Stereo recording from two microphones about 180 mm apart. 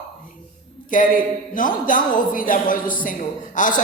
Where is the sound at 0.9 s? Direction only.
50° left (ahead or behind).